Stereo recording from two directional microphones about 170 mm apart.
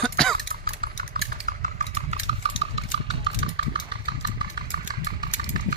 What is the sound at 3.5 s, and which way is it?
Engine, 30° right (ahead or behind).